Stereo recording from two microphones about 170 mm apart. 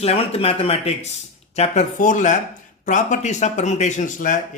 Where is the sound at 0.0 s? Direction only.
35° left (ahead or behind).